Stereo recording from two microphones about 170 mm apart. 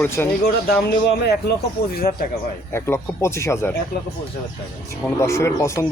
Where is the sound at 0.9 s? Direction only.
70° left (ahead or behind).